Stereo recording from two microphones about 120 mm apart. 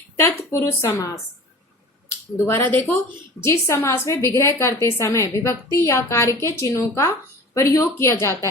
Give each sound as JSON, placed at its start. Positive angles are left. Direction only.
{"t": 0.2, "sound": "a woman's voice", "side_deg": 25}
{"t": 2.4, "sound": "a woman's voice", "side_deg": 15}